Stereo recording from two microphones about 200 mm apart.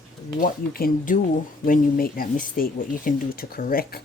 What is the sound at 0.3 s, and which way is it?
Speech, 45° left (ahead or behind).